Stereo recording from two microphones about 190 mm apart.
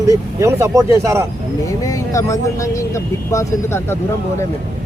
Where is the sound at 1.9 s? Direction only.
15° left (ahead or behind).